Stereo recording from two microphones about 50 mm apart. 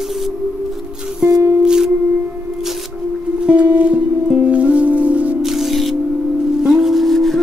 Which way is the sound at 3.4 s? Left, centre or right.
Right.